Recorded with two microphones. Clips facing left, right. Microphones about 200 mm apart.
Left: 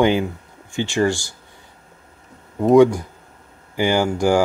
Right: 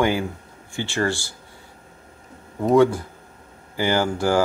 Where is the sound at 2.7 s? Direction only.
15° left (ahead or behind).